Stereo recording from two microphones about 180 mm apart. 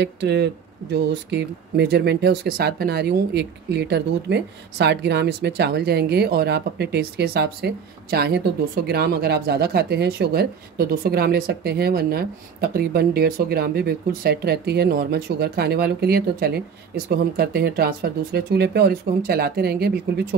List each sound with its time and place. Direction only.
0.0 s speech: 70° right (ahead or behind)